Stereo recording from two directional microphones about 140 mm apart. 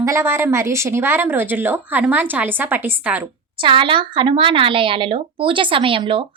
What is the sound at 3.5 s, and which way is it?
Speech, 35° right (ahead or behind).